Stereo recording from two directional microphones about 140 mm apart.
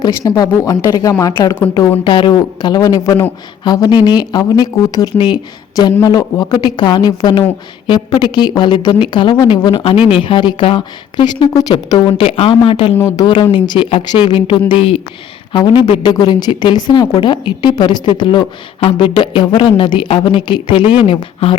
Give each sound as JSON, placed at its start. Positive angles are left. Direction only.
{"t": 0.3, "sound": "speech", "side_deg": 25}
{"t": 2.0, "sound": "a woman's voice", "side_deg": 35}
{"t": 12.2, "sound": "a woman's voice", "side_deg": 40}
{"t": 13.0, "sound": "a woman's voice", "side_deg": 25}